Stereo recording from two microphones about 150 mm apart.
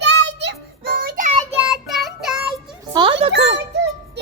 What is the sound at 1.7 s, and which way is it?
Child singing, centre (ahead or behind).